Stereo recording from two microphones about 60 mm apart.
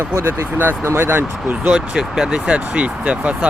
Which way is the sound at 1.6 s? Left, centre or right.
Centre.